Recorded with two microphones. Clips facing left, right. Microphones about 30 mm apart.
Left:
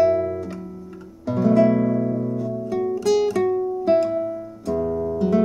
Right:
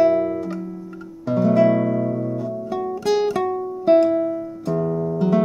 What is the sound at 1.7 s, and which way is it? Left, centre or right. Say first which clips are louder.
Music: even; right.